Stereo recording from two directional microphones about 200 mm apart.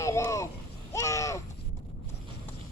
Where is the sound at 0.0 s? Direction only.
15° left (ahead or behind).